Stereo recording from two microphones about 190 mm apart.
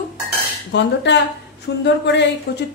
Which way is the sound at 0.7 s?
65° left (ahead or behind).